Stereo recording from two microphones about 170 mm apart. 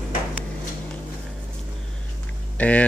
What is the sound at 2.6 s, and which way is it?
Speech, 10° left (ahead or behind).